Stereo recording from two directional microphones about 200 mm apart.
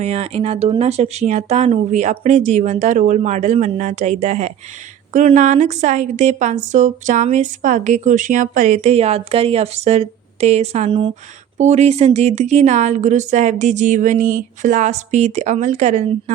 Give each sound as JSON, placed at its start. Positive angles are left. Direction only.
{"t": 0.0, "sound": "a woman's voice", "side_deg": -30}